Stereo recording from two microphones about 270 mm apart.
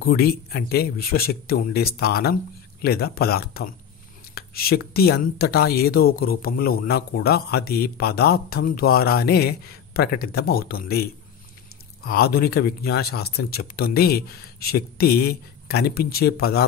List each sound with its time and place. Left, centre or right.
0.0 s speech: left